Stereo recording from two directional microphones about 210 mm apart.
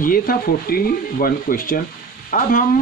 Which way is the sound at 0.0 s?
40° left (ahead or behind).